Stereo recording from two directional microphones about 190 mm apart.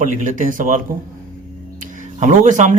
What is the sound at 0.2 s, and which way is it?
Speech, 45° right (ahead or behind).